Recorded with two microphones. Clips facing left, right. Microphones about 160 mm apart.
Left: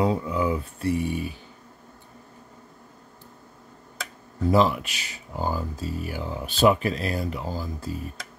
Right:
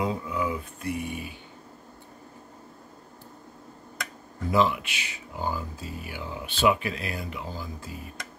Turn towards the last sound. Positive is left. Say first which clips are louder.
# left 6 dB
turn(degrees=40)  # may be behind; listen again after turning